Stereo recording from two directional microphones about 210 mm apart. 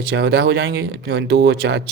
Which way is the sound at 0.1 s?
55° right (ahead or behind).